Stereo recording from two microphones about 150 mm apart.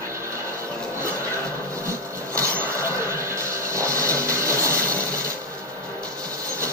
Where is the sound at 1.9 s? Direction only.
20° right (ahead or behind).